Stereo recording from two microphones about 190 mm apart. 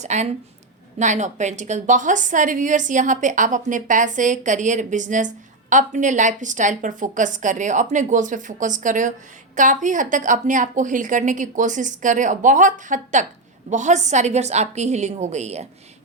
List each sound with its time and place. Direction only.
0.0 s a woman's voice: 35° right (ahead or behind)